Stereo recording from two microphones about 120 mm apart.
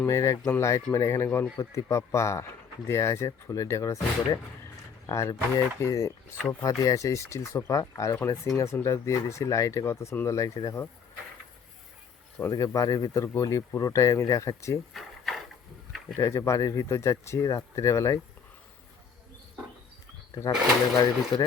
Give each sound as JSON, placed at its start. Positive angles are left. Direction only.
{"t": 0.0, "sound": "speech", "side_deg": 25}
{"t": 12.5, "sound": "speech", "side_deg": 30}
{"t": 14.9, "sound": "a sound", "side_deg": 0}
{"t": 16.1, "sound": "speech", "side_deg": 25}
{"t": 20.9, "sound": "speech", "side_deg": 35}